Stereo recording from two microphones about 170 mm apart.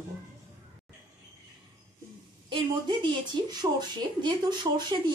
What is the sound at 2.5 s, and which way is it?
A woman's voice, 30° right (ahead or behind).